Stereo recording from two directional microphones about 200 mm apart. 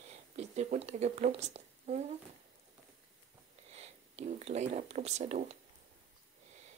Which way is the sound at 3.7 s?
30° right (ahead or behind).